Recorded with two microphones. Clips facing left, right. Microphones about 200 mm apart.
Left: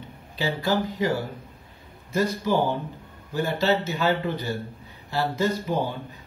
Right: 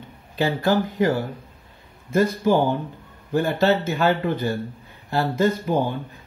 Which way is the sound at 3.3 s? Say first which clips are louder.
Right 4 dB; 50° right (ahead or behind).